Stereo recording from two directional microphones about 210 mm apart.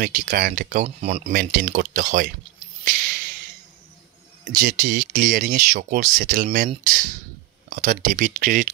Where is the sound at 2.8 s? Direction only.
45° right (ahead or behind).